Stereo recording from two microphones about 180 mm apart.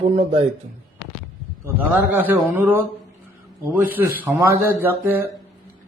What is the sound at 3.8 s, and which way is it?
Speech, 10° right (ahead or behind).